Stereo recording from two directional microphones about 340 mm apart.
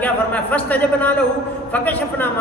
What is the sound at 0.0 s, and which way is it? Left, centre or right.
A man's voice, centre.